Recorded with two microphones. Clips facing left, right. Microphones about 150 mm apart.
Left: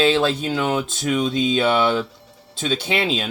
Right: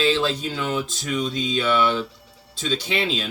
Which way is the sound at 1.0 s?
60° left (ahead or behind).